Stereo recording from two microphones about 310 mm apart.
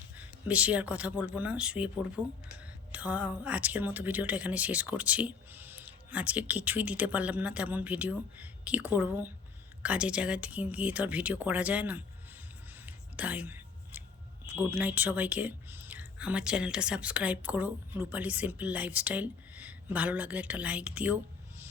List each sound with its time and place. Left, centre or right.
0.2 s speech: centre
12.8 s a sound: centre
14.4 s speech: centre